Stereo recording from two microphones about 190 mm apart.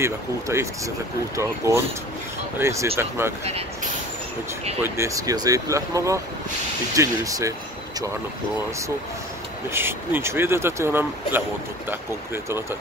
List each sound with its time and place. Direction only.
0.0 s speech: 15° right (ahead or behind)
3.4 s speech: 35° right (ahead or behind)
4.8 s speech: 15° right (ahead or behind)
9.7 s speech: 10° right (ahead or behind)